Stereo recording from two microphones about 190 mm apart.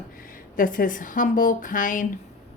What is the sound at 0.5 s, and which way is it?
Speech, 45° left (ahead or behind).